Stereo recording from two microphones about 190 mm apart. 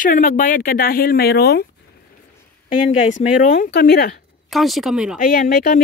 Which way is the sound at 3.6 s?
60° left (ahead or behind).